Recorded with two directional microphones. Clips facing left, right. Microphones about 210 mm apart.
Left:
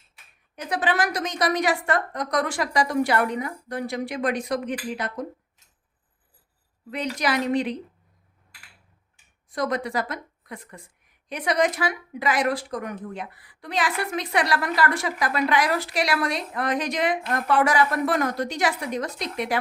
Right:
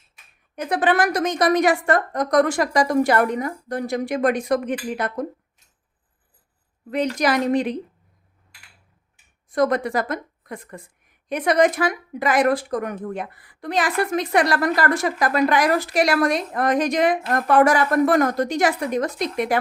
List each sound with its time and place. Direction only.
0.5 s a woman's voice: 55° right (ahead or behind)
6.9 s a woman's voice: 45° right (ahead or behind)
9.5 s a woman's voice: 50° right (ahead or behind)